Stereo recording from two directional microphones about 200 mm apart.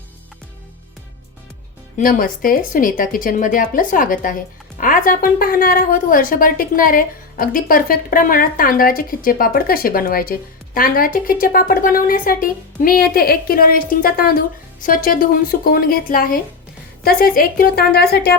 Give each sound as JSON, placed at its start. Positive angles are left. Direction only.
{"t": 2.0, "sound": "a woman's voice", "side_deg": 45}